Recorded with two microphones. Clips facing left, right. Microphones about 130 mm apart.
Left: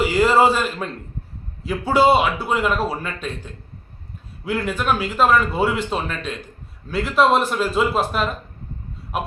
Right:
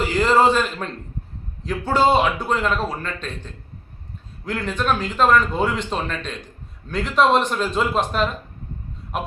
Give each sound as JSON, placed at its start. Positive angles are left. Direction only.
{"t": 0.0, "sound": "a man's voice", "side_deg": 10}